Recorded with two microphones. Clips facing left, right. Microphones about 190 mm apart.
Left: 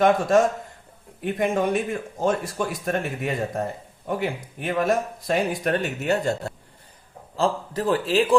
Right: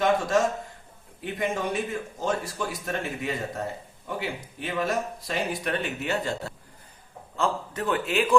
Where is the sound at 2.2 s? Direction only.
50° left (ahead or behind).